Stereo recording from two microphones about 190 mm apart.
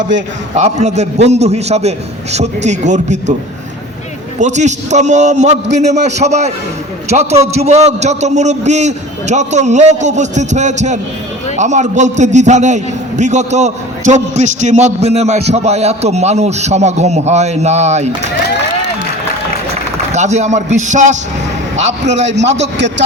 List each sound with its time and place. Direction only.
0.5 s a man's voice: 35° right (ahead or behind)
4.4 s a man's voice: 40° right (ahead or behind)
20.1 s a man's voice: 35° right (ahead or behind)
22.1 s a man's voice: 70° right (ahead or behind)